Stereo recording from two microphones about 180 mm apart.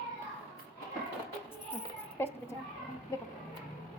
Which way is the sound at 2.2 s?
10° left (ahead or behind).